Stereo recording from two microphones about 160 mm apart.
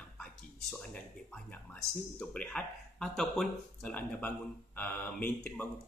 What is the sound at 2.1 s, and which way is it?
Speech, 5° left (ahead or behind).